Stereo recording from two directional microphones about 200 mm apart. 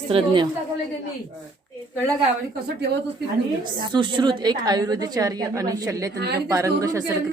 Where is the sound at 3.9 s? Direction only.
25° right (ahead or behind).